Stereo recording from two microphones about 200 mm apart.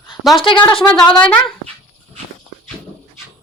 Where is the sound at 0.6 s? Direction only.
5° left (ahead or behind).